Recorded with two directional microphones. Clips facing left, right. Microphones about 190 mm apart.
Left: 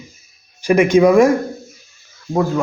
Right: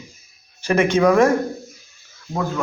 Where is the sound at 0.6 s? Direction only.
10° left (ahead or behind).